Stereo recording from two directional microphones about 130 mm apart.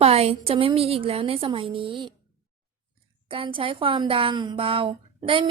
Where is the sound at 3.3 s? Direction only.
45° right (ahead or behind).